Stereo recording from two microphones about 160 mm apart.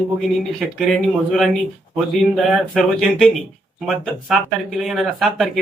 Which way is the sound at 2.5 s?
Centre (ahead or behind).